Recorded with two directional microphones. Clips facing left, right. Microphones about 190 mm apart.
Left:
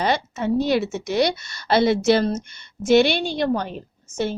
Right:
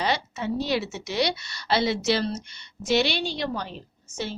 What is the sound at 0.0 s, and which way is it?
A woman's voice, 50° left (ahead or behind).